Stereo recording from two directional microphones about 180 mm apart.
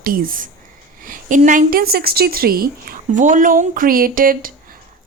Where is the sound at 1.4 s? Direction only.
45° right (ahead or behind).